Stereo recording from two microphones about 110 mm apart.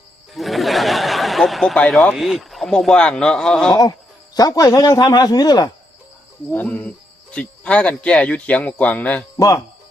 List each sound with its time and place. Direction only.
0.3 s speech: centre (ahead or behind)
4.4 s speech: 35° left (ahead or behind)
6.5 s speech: 15° left (ahead or behind)